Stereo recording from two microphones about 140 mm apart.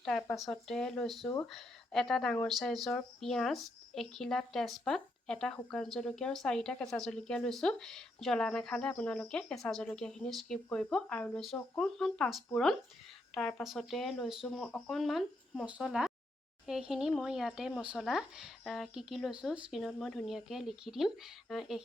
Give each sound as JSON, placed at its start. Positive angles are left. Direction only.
{"t": 0.3, "sound": "speech", "side_deg": 0}